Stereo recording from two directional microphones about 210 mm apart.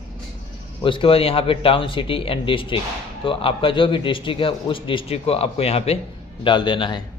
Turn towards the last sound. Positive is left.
turn(degrees=20)  # may be behind; listen again after turning